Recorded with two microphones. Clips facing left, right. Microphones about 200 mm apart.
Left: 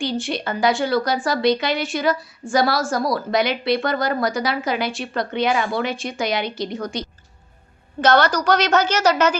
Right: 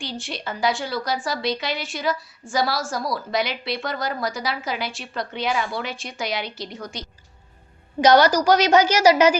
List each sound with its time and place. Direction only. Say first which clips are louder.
0.0 s a woman's voice: left 8 dB; centre (ahead or behind)
5.5 s speech: left 1 dB; 55° left (ahead or behind)
5.7 s a woman's voice: left 6 dB; centre (ahead or behind)
8.0 s a woman's voice: right 2 dB; 10° right (ahead or behind)